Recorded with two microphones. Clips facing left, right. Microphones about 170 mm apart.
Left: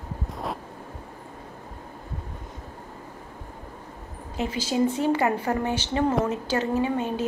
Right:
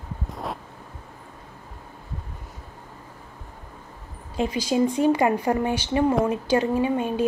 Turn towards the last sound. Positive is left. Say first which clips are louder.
# right 2 dB
turn(degrees=-15)  # may be behind; listen again after turning